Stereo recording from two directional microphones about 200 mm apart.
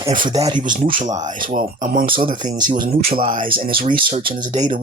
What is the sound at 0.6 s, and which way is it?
Speech, 40° right (ahead or behind).